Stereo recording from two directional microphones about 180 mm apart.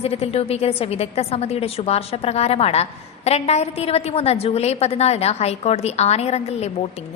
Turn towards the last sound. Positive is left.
turn(degrees=35)  # may be behind; listen again after turning